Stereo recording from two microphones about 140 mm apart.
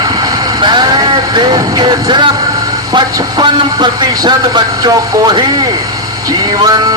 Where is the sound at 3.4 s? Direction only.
35° right (ahead or behind).